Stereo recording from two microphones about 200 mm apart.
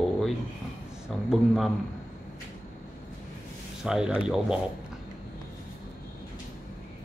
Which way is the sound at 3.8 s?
5° right (ahead or behind).